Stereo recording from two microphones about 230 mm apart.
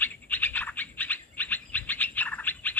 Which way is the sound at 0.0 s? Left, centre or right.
Centre.